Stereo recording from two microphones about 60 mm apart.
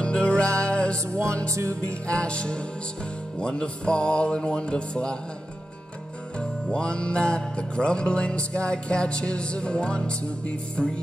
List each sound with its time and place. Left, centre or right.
0.0 s music: centre
1.1 s music: right
2.0 s music: centre
6.7 s music: centre